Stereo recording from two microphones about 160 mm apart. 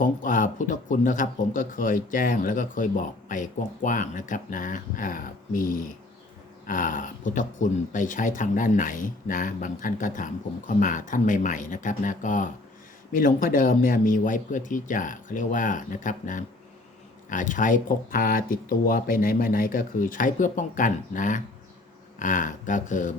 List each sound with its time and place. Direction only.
0.0 s speech: 55° left (ahead or behind)